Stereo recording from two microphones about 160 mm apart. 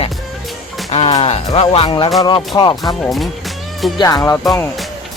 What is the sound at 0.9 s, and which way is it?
Speech, 40° left (ahead or behind).